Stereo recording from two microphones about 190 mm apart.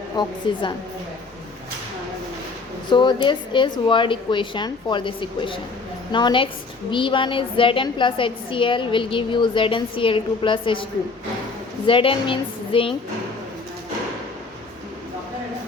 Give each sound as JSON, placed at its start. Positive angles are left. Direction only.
{"t": 0.2, "sound": "a woman's voice", "side_deg": 20}
{"t": 2.9, "sound": "a woman's voice", "side_deg": 25}
{"t": 11.9, "sound": "a woman's voice", "side_deg": 25}